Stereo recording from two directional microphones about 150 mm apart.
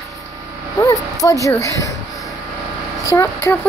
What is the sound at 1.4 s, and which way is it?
Speech, 20° left (ahead or behind).